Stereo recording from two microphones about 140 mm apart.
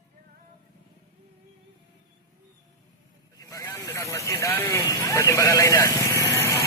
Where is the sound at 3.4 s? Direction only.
25° left (ahead or behind).